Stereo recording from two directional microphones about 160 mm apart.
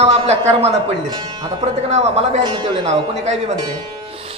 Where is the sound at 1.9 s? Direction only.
40° right (ahead or behind).